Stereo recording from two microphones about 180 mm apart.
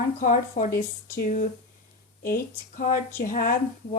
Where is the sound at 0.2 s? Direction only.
45° left (ahead or behind).